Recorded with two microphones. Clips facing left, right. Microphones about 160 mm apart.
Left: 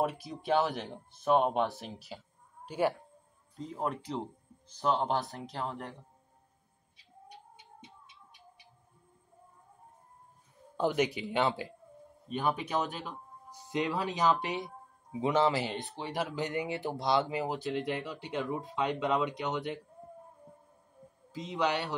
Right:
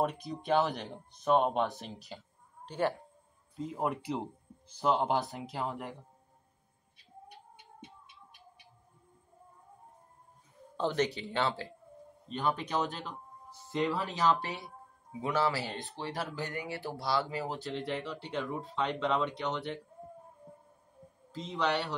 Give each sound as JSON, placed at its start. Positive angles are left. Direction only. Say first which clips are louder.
{"t": 0.0, "sound": "speech", "louder": "even", "side_deg": 5}
{"t": 3.5, "sound": "speech", "louder": "right 1 dB", "side_deg": -5}
{"t": 7.2, "sound": "bird", "louder": "left 1 dB", "side_deg": -55}
{"t": 10.8, "sound": "speech", "louder": "left 2 dB", "side_deg": 10}
{"t": 13.5, "sound": "speech", "louder": "right 1 dB", "side_deg": 15}
{"t": 21.3, "sound": "speech", "louder": "left 1 dB", "side_deg": 15}